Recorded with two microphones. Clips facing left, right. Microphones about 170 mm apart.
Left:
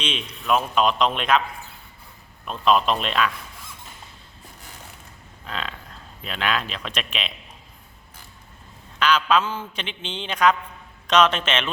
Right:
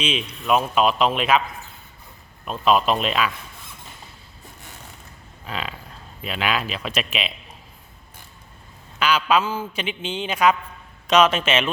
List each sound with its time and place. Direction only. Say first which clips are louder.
0.0 s a man's voice: right 4 dB; 5° right (ahead or behind)
2.4 s a man's voice: right 1 dB; 5° right (ahead or behind)
5.5 s a man's voice: right 2 dB; 5° right (ahead or behind)
9.0 s a man's voice: even; 10° right (ahead or behind)